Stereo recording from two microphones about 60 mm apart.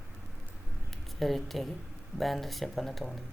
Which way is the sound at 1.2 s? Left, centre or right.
Centre.